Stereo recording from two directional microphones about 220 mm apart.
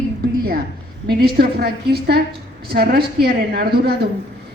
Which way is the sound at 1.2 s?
45° right (ahead or behind).